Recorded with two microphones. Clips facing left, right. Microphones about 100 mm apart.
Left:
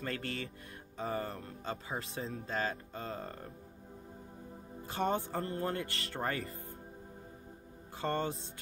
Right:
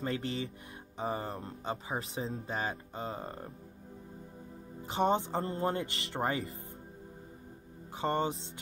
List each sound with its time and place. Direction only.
0.0 s speech: 20° right (ahead or behind)
4.8 s speech: 20° right (ahead or behind)
8.0 s speech: 20° right (ahead or behind)